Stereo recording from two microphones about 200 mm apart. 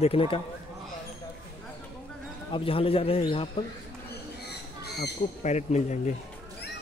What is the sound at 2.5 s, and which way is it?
Speech, 25° left (ahead or behind).